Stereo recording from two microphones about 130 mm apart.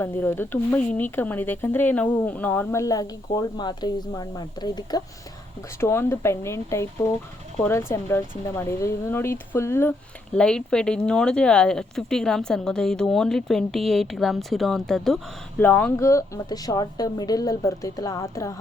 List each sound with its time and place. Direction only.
0.0 s speech: 15° left (ahead or behind)
5.8 s a woman's voice: 20° left (ahead or behind)
10.3 s speech: 5° left (ahead or behind)
15.5 s a woman's voice: 15° left (ahead or behind)